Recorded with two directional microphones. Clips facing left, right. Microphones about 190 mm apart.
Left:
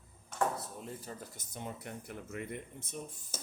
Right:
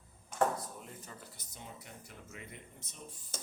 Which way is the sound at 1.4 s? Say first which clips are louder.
Left 7 dB; 55° left (ahead or behind).